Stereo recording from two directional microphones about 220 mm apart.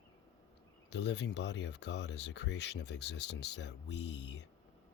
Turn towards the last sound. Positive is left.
turn(degrees=50)  # may be behind; listen again after turning